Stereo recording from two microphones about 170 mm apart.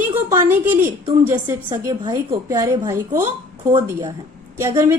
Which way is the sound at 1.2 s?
10° right (ahead or behind).